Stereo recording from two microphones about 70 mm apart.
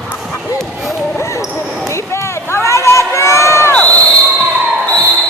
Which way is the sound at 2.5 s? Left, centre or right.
Left.